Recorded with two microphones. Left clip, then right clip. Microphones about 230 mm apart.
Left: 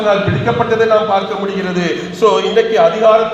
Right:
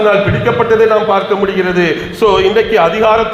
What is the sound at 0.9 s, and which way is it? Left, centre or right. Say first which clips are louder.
A man's voice: right 2 dB; right.